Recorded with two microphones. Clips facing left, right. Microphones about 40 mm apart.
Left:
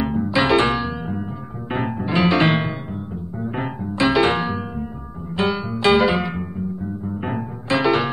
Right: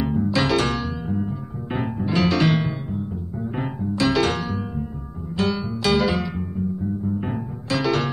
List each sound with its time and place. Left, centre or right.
0.0 s music: left